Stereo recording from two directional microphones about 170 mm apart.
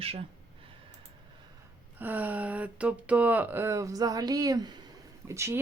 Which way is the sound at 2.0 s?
10° right (ahead or behind).